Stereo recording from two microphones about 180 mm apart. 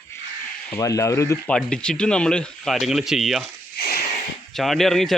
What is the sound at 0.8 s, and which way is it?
Speech, 15° left (ahead or behind).